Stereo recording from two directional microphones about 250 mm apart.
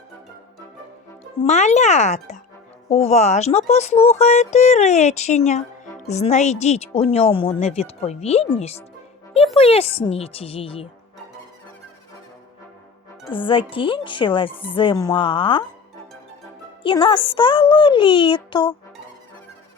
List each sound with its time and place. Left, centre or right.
1.4 s speech: left
13.3 s speech: left
16.8 s speech: centre